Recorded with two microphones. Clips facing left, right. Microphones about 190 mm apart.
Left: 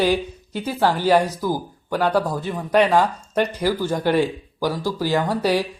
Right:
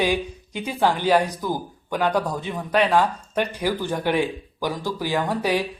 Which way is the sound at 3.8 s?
10° left (ahead or behind).